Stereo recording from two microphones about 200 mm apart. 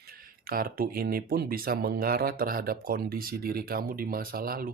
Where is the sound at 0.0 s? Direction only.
45° right (ahead or behind).